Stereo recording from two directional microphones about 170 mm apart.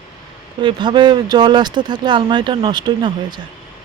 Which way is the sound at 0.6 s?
25° right (ahead or behind).